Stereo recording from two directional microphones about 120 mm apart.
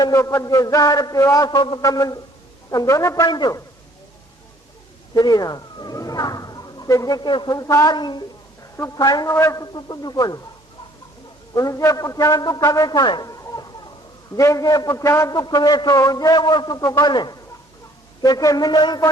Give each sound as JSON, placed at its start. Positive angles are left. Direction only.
{"t": 0.0, "sound": "a man's voice", "side_deg": 25}
{"t": 5.1, "sound": "a man's voice", "side_deg": 30}
{"t": 8.7, "sound": "a woman's voice", "side_deg": 25}
{"t": 9.0, "sound": "a man's voice", "side_deg": 35}
{"t": 11.5, "sound": "a man's voice", "side_deg": 30}